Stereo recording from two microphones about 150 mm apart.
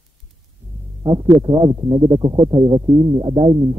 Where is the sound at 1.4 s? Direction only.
30° right (ahead or behind).